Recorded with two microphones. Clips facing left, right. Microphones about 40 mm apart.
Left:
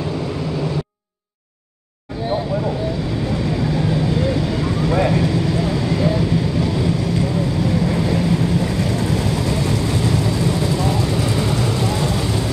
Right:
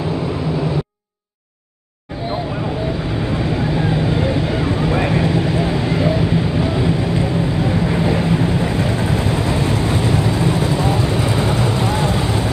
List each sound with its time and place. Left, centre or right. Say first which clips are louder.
3.1 s vehicle: right 1 dB; right